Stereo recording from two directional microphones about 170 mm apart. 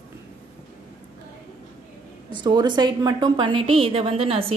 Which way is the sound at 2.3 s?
25° right (ahead or behind).